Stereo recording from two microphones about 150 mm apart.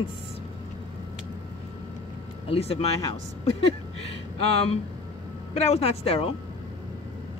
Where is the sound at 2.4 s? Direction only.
40° left (ahead or behind).